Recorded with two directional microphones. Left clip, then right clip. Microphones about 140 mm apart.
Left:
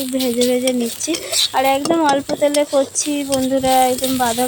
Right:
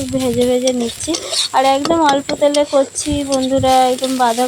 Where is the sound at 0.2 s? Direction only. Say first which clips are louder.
Right 2 dB; centre (ahead or behind).